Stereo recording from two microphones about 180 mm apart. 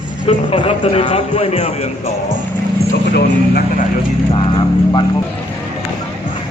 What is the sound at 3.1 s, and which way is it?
Speech, 60° left (ahead or behind).